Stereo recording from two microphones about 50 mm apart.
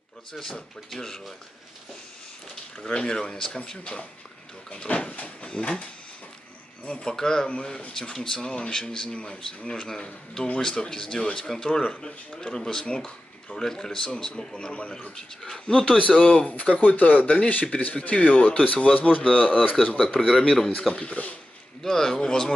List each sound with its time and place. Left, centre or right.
0.3 s speech: centre
2.8 s speech: centre
8.4 s speech: left
20.2 s a man's voice: centre
20.9 s speech: left
21.8 s speech: centre